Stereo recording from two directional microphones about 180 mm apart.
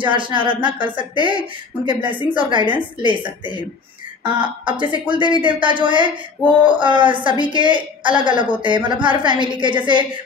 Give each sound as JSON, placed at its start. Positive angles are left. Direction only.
{"t": 0.0, "sound": "speech", "side_deg": -25}
{"t": 4.2, "sound": "speech", "side_deg": -25}